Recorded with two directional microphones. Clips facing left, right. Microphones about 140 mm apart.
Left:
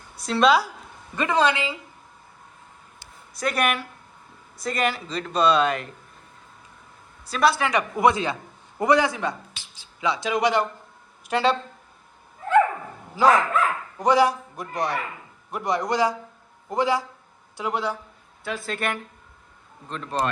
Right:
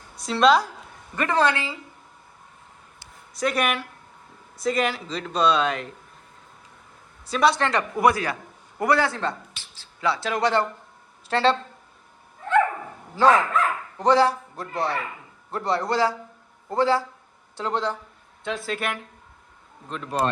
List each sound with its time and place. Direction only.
0.2 s speech: centre (ahead or behind)
1.1 s speech: 15° left (ahead or behind)
3.3 s speech: centre (ahead or behind)
7.3 s speech: centre (ahead or behind)
13.1 s speech: 10° left (ahead or behind); by 20.1 s 5° right (ahead or behind)